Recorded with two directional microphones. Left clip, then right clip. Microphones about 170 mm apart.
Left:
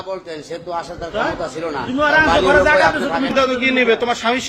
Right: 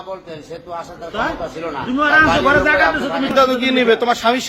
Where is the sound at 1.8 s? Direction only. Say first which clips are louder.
Right 1 dB; 60° right (ahead or behind).